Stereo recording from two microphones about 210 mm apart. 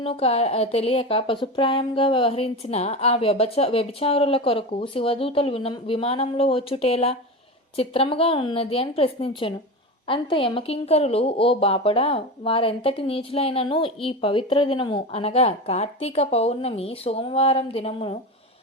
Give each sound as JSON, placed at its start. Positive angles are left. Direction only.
{"t": 0.0, "sound": "a woman's voice", "side_deg": 25}